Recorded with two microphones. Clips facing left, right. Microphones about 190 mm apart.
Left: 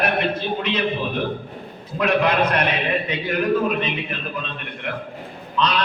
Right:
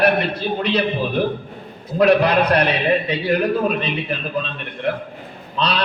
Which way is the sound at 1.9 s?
35° right (ahead or behind).